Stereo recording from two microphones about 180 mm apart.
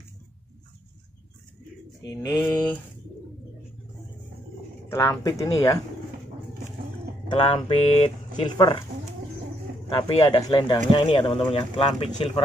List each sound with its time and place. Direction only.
2.2 s speech: 20° left (ahead or behind)
4.8 s speech: 15° left (ahead or behind)
7.2 s speech: 30° left (ahead or behind)
9.8 s speech: 25° left (ahead or behind)